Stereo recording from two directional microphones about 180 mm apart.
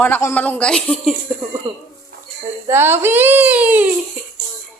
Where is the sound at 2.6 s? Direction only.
15° right (ahead or behind).